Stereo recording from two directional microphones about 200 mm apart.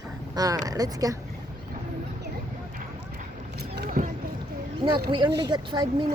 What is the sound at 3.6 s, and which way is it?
Rowboat, 55° right (ahead or behind).